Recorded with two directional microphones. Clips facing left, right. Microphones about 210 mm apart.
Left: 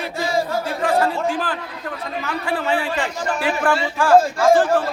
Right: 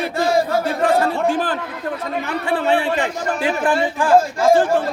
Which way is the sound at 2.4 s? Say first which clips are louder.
Right 4 dB; 25° right (ahead or behind).